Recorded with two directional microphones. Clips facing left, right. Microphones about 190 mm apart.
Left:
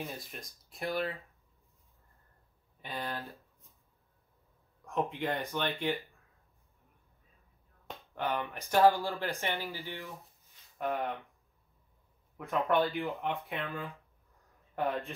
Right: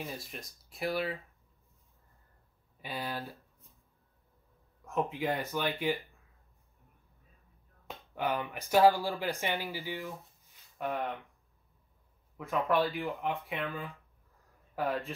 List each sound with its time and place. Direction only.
0.0 s speech: centre (ahead or behind)
2.8 s speech: 10° right (ahead or behind)
4.8 s speech: centre (ahead or behind)
7.9 s speech: 10° right (ahead or behind)
10.8 s speech: centre (ahead or behind)
12.4 s speech: centre (ahead or behind)